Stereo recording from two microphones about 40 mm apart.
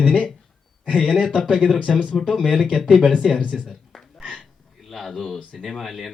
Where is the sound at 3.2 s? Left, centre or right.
Centre.